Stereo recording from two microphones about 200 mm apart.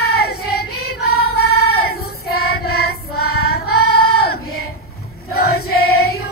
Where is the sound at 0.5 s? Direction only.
50° left (ahead or behind).